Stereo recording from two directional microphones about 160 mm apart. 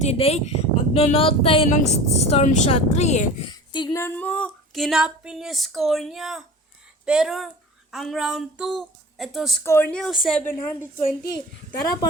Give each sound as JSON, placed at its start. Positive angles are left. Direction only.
{"t": 0.0, "sound": "speech", "side_deg": 40}
{"t": 3.5, "sound": "a sound", "side_deg": 30}
{"t": 3.9, "sound": "speech", "side_deg": 15}
{"t": 9.6, "sound": "speech", "side_deg": 15}
{"t": 10.4, "sound": "a woman's voice", "side_deg": 15}